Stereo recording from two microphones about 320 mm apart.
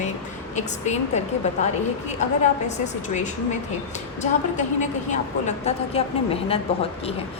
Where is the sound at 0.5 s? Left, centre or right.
Left.